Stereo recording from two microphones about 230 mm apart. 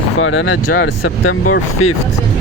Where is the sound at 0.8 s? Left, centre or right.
Left.